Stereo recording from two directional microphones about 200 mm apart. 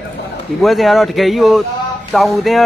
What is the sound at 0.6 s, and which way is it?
A man's voice, centre (ahead or behind).